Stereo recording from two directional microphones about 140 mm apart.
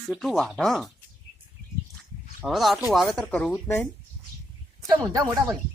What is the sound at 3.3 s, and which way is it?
Speech, 10° left (ahead or behind).